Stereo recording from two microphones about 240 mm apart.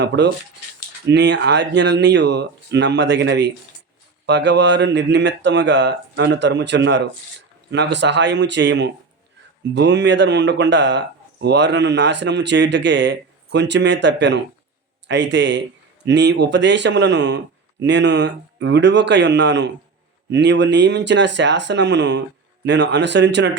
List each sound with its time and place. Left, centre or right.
0.2 s speech: right